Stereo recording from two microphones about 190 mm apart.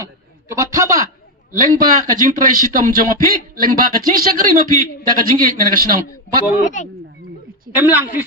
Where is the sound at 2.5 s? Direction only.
45° right (ahead or behind).